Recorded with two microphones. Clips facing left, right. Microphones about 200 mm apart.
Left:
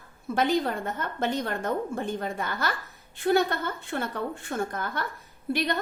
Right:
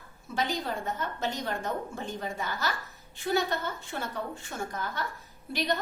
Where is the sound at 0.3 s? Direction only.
55° left (ahead or behind).